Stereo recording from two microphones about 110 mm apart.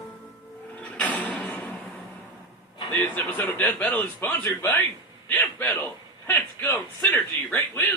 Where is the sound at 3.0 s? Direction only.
15° left (ahead or behind).